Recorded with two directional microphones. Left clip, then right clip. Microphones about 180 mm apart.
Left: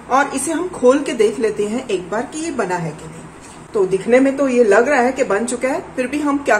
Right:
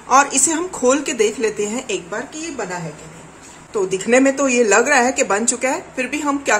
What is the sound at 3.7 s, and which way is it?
A woman's voice, 25° right (ahead or behind).